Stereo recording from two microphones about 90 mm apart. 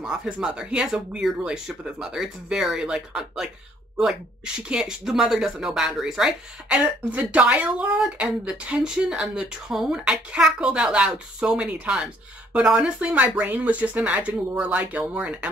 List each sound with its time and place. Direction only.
0.0 s speech: 10° right (ahead or behind)